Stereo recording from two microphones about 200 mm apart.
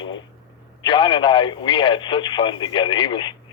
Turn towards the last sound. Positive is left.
turn(degrees=20)  # may be behind; listen again after turning